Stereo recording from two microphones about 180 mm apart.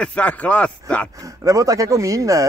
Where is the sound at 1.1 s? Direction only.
20° right (ahead or behind).